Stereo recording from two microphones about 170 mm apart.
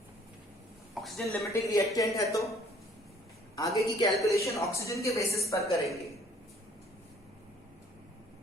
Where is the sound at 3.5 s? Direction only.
20° left (ahead or behind).